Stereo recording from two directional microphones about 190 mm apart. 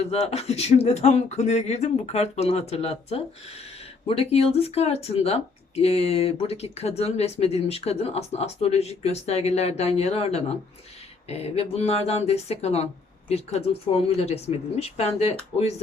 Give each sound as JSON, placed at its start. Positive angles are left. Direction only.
{"t": 0.1, "sound": "speech", "side_deg": 35}